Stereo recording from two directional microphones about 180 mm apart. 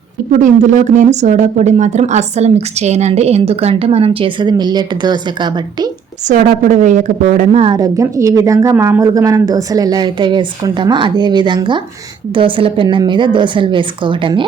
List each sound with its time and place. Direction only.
0.3 s speech: 45° right (ahead or behind); by 5.9 s 25° right (ahead or behind)
6.2 s speech: 50° right (ahead or behind)
7.8 s speech: 20° right (ahead or behind)